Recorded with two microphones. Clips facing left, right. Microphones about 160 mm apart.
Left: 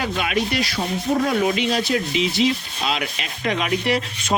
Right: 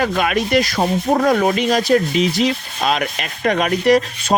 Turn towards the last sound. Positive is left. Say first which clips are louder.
# right 8 dB
turn(degrees=-45)  # may be behind; listen again after turning